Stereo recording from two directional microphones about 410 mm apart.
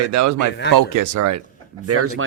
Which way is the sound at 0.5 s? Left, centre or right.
Left.